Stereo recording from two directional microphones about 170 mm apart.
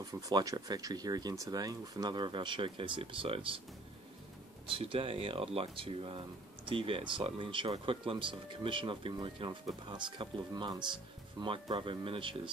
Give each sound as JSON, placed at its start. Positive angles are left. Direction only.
{"t": 0.0, "sound": "speech", "side_deg": -20}
{"t": 4.6, "sound": "speech", "side_deg": -35}